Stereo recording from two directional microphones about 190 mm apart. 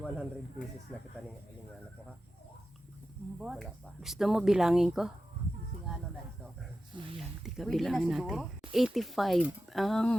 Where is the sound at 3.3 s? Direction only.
5° right (ahead or behind).